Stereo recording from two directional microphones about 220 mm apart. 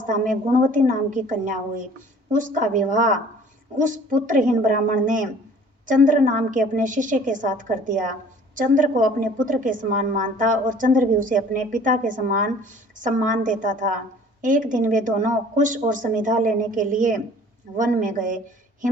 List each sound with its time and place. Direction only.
0.0 s a woman's voice: 35° right (ahead or behind)